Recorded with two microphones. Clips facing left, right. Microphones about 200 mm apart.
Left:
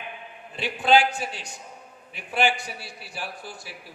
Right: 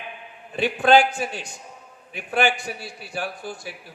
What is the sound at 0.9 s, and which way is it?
A man's voice, 50° right (ahead or behind).